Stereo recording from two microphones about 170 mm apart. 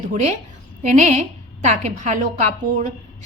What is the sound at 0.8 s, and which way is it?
A woman's voice, 45° right (ahead or behind).